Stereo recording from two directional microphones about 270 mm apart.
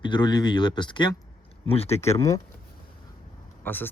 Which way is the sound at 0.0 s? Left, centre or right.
Centre.